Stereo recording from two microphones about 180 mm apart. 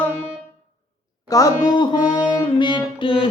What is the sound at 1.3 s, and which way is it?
Speech, 20° left (ahead or behind).